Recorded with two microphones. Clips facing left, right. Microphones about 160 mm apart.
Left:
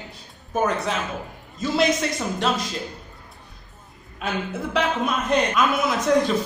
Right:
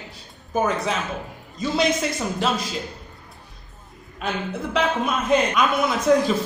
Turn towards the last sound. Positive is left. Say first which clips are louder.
# right 1 dB
turn(degrees=0)  # may be behind; listen again after turning